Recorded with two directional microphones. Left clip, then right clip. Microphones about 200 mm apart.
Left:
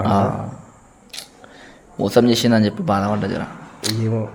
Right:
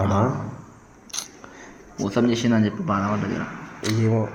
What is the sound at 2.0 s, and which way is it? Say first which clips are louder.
Speech: left 7 dB; 50° left (ahead or behind).